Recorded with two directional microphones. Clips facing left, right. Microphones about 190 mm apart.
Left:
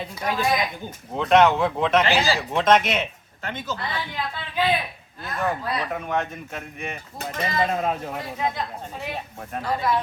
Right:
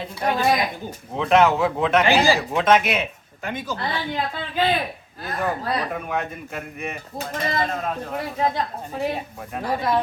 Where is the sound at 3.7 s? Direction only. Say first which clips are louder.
Right 4 dB; 40° right (ahead or behind).